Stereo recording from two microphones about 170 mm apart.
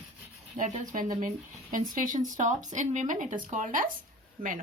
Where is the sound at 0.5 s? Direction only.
50° right (ahead or behind).